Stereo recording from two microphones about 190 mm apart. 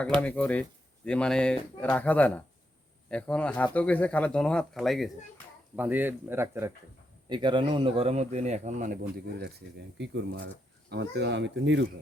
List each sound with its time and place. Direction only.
0.2 s speech: 5° left (ahead or behind); by 6.7 s 10° right (ahead or behind)
7.3 s speech: 25° right (ahead or behind); by 9.5 s 45° right (ahead or behind)
10.0 s speech: 65° right (ahead or behind)